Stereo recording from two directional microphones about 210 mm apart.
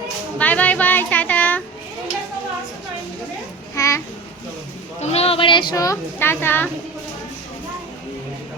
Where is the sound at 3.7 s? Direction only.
15° left (ahead or behind).